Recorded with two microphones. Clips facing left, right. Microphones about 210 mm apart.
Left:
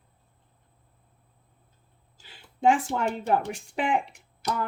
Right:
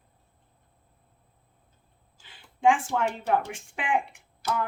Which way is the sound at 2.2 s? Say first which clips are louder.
Left 1 dB; 40° left (ahead or behind).